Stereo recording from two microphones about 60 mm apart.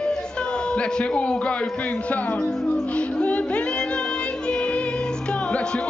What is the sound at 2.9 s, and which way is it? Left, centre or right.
Music, left.